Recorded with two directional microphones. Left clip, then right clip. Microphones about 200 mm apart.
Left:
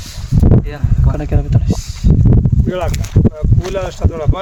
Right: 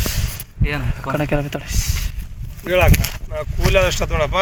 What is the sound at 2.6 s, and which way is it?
Speech, 15° left (ahead or behind).